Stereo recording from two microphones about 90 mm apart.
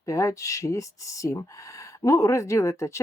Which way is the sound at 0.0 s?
35° left (ahead or behind).